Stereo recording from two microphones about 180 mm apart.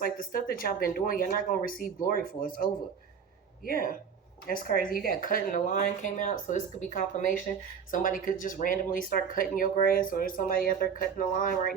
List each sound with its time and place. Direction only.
0.0 s speech: 50° left (ahead or behind)
3.7 s speech: 50° left (ahead or behind)